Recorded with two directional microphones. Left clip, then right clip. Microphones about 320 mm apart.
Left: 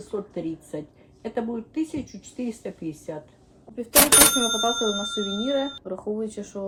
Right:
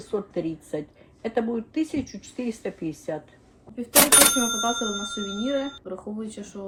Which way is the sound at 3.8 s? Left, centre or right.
Centre.